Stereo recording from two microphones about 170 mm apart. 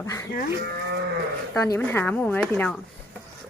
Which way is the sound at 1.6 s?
15° left (ahead or behind).